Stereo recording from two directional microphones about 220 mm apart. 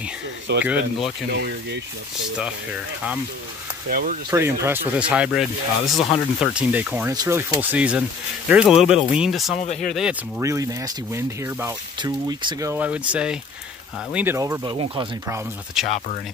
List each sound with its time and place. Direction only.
0.5 s speech: 55° right (ahead or behind)
3.9 s speech: 40° right (ahead or behind)
4.3 s speech: 15° right (ahead or behind)
9.6 s speech: 35° left (ahead or behind)
10.4 s speech: 15° right (ahead or behind)
15.8 s speech: centre (ahead or behind)